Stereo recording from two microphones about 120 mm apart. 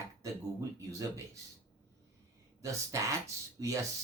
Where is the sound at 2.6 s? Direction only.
25° right (ahead or behind).